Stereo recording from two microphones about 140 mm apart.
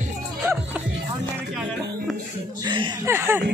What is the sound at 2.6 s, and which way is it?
Chuckle, 35° right (ahead or behind).